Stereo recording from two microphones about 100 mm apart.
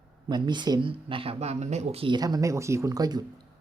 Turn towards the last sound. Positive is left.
turn(degrees=-40)  # may be behind; listen again after turning